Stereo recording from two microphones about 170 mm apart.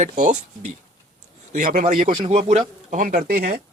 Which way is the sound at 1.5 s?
50° right (ahead or behind).